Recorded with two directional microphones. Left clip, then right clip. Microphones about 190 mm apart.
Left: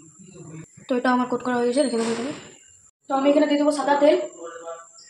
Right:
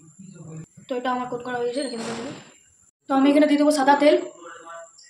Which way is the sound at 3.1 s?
35° right (ahead or behind).